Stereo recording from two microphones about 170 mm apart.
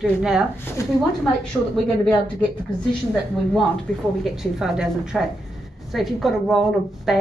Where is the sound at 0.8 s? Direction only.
15° left (ahead or behind).